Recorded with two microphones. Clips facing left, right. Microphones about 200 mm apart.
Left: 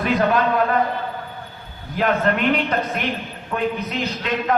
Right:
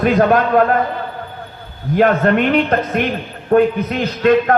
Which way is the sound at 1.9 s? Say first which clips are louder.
Right 7 dB; 50° right (ahead or behind).